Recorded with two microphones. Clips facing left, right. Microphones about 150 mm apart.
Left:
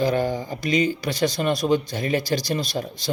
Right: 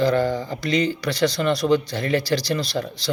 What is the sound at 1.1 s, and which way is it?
Speech, 50° left (ahead or behind).